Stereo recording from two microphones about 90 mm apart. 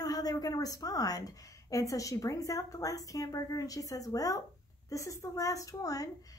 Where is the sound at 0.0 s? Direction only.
45° left (ahead or behind).